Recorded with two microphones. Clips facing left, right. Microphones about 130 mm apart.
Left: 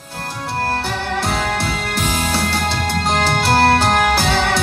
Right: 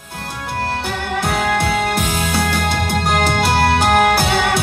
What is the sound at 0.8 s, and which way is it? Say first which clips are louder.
Music: even; 15° right (ahead or behind).